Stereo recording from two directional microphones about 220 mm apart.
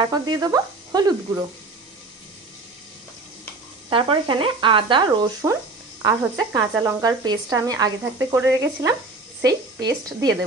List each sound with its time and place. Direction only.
0.1 s speech: 20° right (ahead or behind)
3.9 s speech: 25° right (ahead or behind)